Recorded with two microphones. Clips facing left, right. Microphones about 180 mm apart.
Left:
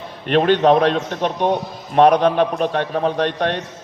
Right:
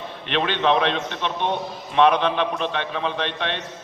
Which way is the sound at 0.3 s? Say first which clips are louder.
Left 7 dB; 45° left (ahead or behind).